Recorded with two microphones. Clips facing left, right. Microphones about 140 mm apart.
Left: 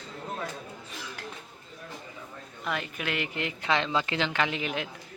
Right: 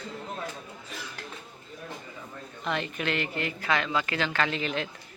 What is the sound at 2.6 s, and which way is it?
A woman's voice, 5° left (ahead or behind).